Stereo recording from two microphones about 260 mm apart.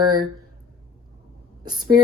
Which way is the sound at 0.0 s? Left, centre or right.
Centre.